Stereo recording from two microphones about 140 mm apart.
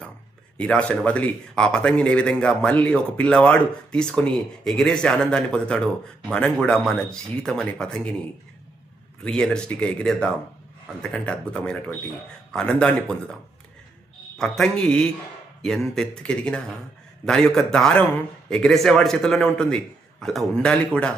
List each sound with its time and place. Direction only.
0.5 s speech: 10° left (ahead or behind)
9.2 s speech: 5° left (ahead or behind)
14.3 s a man's voice: 5° left (ahead or behind)